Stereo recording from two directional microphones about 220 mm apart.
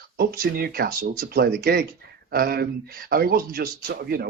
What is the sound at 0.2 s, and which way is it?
Speech, 45° right (ahead or behind).